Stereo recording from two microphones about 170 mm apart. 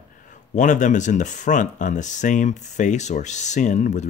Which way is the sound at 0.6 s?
45° left (ahead or behind).